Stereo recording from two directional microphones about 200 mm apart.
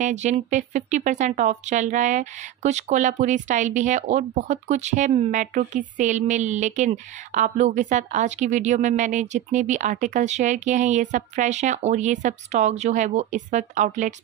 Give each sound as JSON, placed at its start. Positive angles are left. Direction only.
{"t": 0.0, "sound": "speech", "side_deg": -35}